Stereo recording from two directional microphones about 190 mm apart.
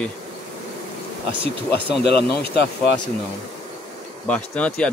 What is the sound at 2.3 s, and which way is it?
Speech, 55° left (ahead or behind).